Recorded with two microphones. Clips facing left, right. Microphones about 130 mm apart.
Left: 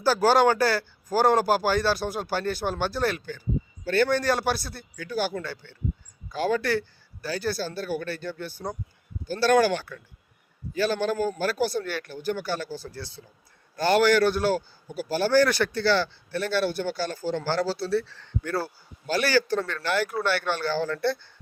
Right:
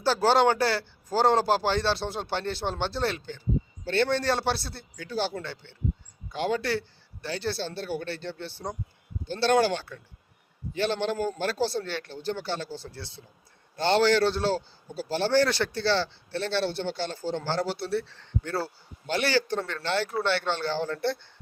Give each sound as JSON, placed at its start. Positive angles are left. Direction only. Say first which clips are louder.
{"t": 0.0, "sound": "speech", "louder": "left 2 dB", "side_deg": -25}